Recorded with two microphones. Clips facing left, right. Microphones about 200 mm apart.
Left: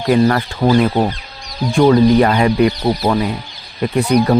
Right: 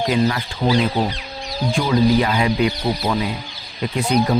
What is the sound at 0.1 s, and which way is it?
Speech, 55° left (ahead or behind).